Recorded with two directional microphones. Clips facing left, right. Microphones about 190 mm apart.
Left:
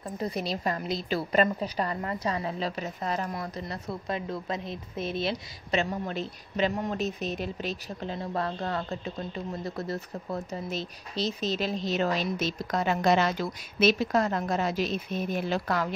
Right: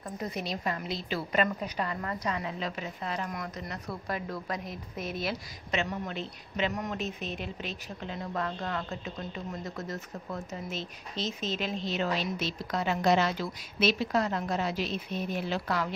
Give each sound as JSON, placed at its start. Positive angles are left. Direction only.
{"t": 0.2, "sound": "a woman's voice", "side_deg": 35}
{"t": 4.1, "sound": "a woman's voice", "side_deg": 25}